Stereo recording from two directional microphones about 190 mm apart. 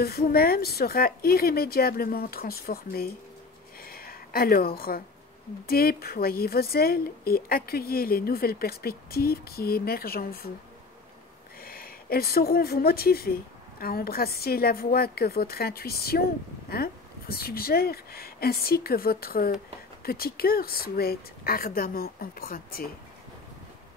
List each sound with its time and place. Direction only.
0.0 s a woman's voice: 55° left (ahead or behind)
3.8 s a sound: 50° left (ahead or behind)
5.7 s a woman's voice: 50° left (ahead or behind)
11.6 s a woman's voice: 50° left (ahead or behind)